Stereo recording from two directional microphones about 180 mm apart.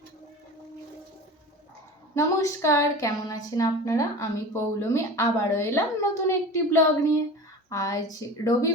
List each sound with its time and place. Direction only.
2.1 s a woman's voice: 15° left (ahead or behind)